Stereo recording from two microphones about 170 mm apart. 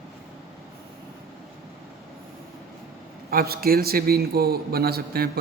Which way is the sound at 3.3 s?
60° right (ahead or behind).